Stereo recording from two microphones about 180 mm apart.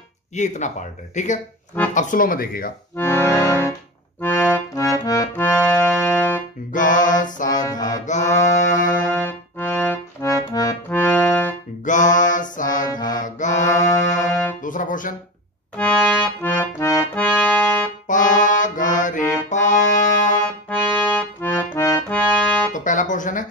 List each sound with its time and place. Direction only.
0.4 s speech: 40° left (ahead or behind)
3.0 s accordion: 15° left (ahead or behind)
6.7 s music: 45° left (ahead or behind)
7.7 s music: 20° left (ahead or behind)
8.1 s mantra: 40° left (ahead or behind)
9.0 s accordion: 10° left (ahead or behind)
11.8 s mantra: 45° left (ahead or behind)
12.9 s music: 20° left (ahead or behind)
13.2 s mantra: 45° left (ahead or behind)
13.7 s music: 40° left (ahead or behind)
15.8 s accordion: 5° left (ahead or behind)
18.0 s music: 45° left (ahead or behind)
20.7 s accordion: 5° left (ahead or behind)
22.7 s music: 45° left (ahead or behind)